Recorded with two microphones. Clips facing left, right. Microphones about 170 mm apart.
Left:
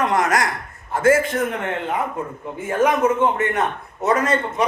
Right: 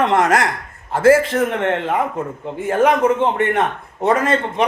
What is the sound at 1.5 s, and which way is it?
Speech, 75° right (ahead or behind).